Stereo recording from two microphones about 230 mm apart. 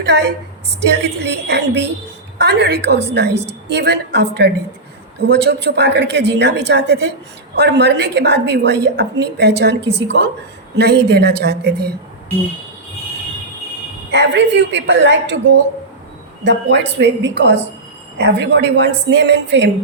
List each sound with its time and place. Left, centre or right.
0.0 s a woman's voice: right
14.1 s a woman's voice: right